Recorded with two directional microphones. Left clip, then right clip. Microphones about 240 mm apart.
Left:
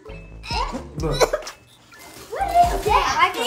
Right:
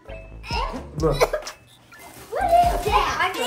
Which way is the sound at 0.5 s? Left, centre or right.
Left.